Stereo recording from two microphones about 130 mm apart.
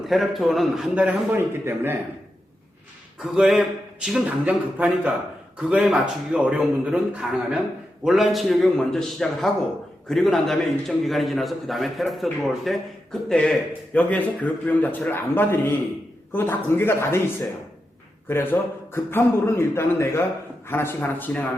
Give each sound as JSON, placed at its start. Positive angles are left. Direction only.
{"t": 0.1, "sound": "a man's voice", "side_deg": 0}
{"t": 1.4, "sound": "a man's voice", "side_deg": -15}
{"t": 3.2, "sound": "a man's voice", "side_deg": 0}
{"t": 18.3, "sound": "a man's voice", "side_deg": 20}